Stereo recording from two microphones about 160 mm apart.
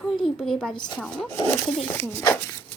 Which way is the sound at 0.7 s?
25° left (ahead or behind).